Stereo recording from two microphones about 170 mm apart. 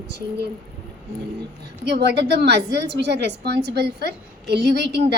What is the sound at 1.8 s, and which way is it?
A woman's voice, 80° right.